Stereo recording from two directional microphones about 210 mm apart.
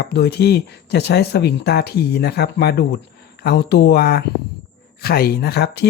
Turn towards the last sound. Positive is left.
turn(degrees=50)  # may be behind; listen again after turning